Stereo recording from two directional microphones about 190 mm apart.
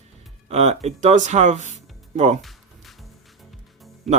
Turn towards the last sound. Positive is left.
turn(degrees=0)  # may be behind; listen again after turning